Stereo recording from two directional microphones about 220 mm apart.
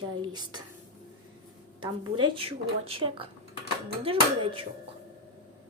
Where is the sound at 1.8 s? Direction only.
20° right (ahead or behind).